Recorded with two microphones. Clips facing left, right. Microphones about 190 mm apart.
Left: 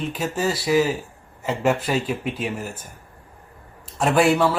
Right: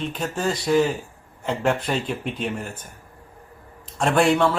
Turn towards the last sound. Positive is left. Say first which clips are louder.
# left 1 dB
turn(degrees=5)  # may be behind; listen again after turning